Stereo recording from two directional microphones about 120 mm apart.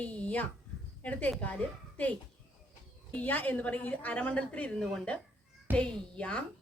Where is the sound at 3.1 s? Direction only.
15° left (ahead or behind).